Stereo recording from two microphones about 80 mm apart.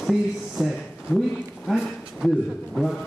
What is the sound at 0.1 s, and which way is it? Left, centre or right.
A man's voice, centre.